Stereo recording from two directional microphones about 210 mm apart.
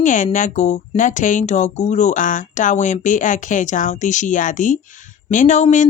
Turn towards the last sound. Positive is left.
turn(degrees=35)  # may be behind; listen again after turning